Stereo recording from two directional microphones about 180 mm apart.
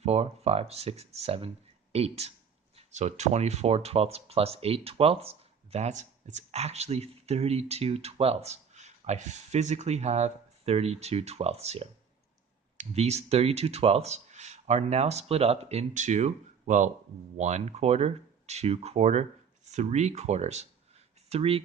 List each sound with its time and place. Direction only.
0.0 s speech: 35° right (ahead or behind)